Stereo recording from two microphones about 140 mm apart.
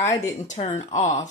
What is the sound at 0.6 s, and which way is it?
Speech, 50° left (ahead or behind).